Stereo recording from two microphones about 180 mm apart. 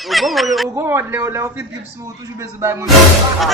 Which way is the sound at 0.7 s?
15° right (ahead or behind).